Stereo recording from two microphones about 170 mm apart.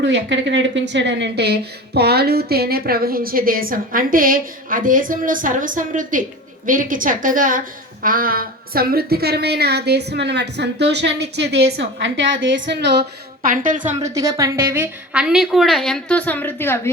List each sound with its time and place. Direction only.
0.0 s a woman's voice: 90° right
13.4 s a woman's voice: 55° right (ahead or behind)
14.0 s a woman's voice: 20° right (ahead or behind); by 16.9 s 15° left (ahead or behind)